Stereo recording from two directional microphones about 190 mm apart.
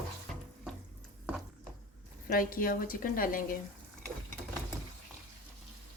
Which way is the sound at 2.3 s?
50° left (ahead or behind).